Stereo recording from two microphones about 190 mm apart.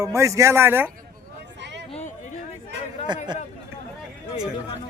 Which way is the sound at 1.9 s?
35° left (ahead or behind).